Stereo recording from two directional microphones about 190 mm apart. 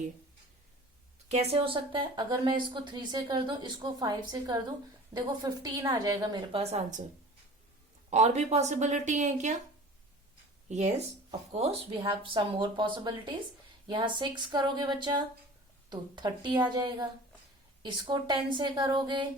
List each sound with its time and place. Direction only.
1.3 s speech: 35° right (ahead or behind)
6.6 s a woman's voice: 35° right (ahead or behind)
8.1 s a woman's voice: 35° right (ahead or behind)
10.7 s a woman's voice: 40° right (ahead or behind)